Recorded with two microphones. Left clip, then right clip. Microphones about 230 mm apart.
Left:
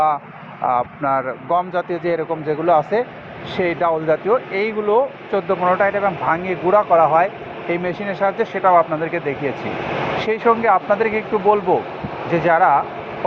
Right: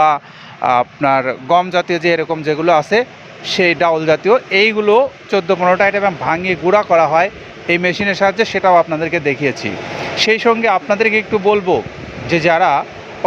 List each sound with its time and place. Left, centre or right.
0.6 s speech: right
10.2 s speech: right